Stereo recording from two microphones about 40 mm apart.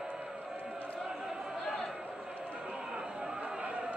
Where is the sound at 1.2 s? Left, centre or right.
Centre.